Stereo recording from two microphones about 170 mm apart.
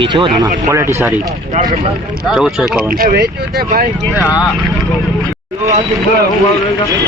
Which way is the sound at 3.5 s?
65° right (ahead or behind).